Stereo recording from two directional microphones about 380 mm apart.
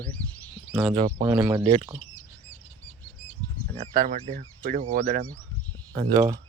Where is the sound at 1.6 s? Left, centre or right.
Centre.